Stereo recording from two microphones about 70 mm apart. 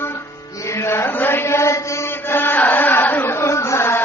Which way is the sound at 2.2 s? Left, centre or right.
Left.